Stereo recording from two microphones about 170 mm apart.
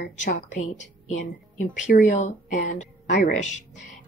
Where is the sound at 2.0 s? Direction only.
45° left (ahead or behind).